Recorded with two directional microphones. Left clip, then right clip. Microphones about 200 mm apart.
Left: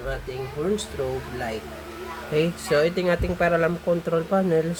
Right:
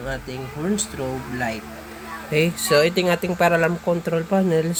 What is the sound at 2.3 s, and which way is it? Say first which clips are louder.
Speech: right 4 dB; 5° right (ahead or behind).